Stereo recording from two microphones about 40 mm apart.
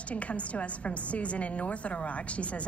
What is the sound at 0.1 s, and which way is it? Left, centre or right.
A woman's voice, left.